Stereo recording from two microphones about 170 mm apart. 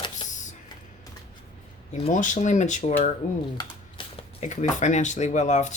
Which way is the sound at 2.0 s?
50° left (ahead or behind).